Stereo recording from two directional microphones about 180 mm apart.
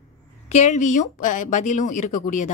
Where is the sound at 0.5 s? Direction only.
40° left (ahead or behind).